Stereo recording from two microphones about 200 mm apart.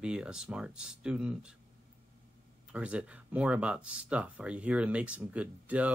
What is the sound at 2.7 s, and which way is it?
Speech, 5° right (ahead or behind).